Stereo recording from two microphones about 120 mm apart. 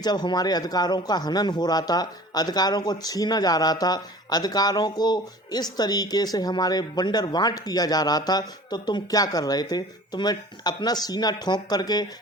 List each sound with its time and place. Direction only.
0.0 s speech: 35° left (ahead or behind)